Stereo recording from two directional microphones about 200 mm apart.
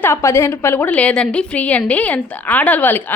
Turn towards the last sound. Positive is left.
turn(degrees=10)  # may be behind; listen again after turning